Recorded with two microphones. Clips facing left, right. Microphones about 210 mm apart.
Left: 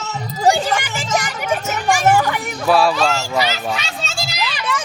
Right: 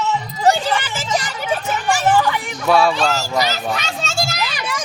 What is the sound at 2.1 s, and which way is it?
Children playing, 45° left (ahead or behind).